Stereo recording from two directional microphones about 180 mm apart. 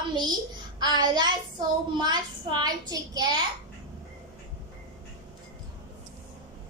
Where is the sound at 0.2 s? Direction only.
25° right (ahead or behind).